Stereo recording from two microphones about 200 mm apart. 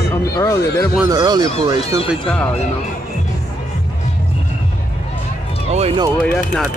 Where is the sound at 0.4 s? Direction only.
15° left (ahead or behind).